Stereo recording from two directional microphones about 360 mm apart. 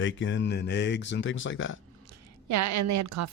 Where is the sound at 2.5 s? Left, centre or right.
Right.